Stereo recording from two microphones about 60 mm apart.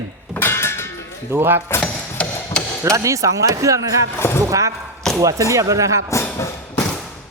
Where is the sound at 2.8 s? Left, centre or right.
Right.